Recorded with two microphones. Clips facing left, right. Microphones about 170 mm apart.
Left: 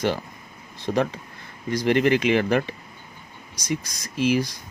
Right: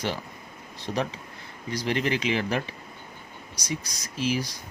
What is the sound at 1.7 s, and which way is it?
Speech, 55° left (ahead or behind).